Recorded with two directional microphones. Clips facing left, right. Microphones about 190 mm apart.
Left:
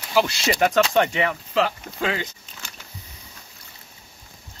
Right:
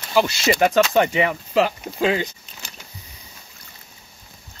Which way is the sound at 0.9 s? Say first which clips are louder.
Right 2 dB; 5° right (ahead or behind).